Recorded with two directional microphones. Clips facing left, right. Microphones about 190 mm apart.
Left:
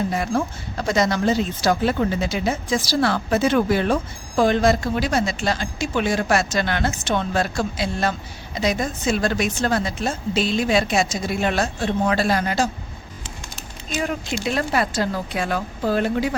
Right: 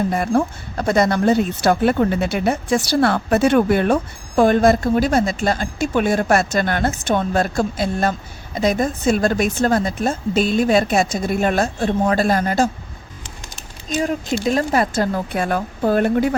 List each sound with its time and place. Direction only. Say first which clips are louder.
0.1 s speech: right 4 dB; 50° right (ahead or behind)
13.8 s speech: right 4 dB; 40° right (ahead or behind)